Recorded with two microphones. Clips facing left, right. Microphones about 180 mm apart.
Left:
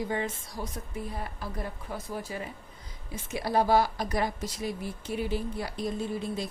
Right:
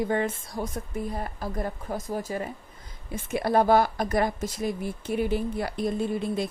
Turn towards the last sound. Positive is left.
turn(degrees=-60)  # may be behind; listen again after turning